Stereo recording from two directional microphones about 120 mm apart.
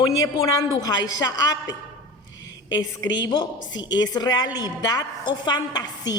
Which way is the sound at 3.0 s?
35° left (ahead or behind).